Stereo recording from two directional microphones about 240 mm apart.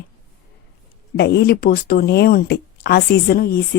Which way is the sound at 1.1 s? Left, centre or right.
Left.